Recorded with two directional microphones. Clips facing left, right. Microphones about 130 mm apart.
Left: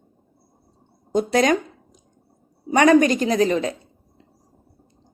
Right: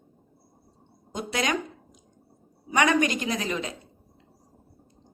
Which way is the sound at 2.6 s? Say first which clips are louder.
Left 8 dB; 40° left (ahead or behind).